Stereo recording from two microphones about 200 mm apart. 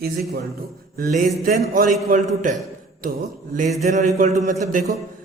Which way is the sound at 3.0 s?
45° right (ahead or behind).